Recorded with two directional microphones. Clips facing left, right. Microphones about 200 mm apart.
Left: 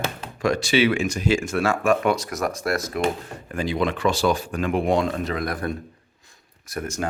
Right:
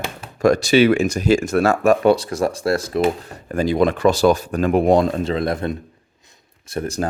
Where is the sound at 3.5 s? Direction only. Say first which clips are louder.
Right 7 dB; 40° right (ahead or behind).